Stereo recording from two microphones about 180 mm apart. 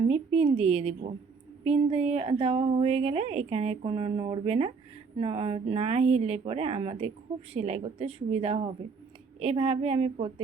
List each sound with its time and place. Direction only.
0.0 s a woman's voice: 35° right (ahead or behind)